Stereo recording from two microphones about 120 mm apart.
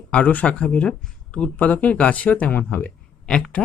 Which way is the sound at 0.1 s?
10° left (ahead or behind).